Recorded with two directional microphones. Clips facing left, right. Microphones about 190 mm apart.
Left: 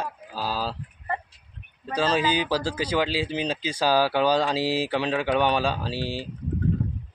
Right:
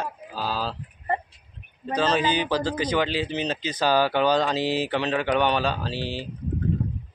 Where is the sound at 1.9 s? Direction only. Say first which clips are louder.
Even; 10° left (ahead or behind).